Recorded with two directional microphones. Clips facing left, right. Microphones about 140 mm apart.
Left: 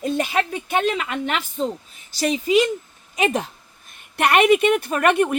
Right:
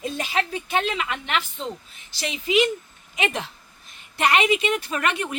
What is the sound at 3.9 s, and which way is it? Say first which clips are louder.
A woman's voice: left 3 dB; 60° left (ahead or behind).